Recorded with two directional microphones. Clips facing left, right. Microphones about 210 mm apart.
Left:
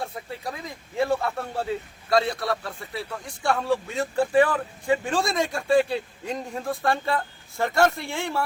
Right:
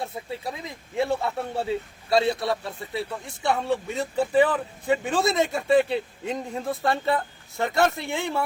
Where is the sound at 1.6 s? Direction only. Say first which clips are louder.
Right 2 dB; 25° right (ahead or behind).